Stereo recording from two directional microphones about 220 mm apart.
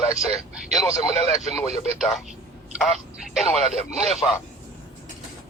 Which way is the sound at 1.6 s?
30° right (ahead or behind).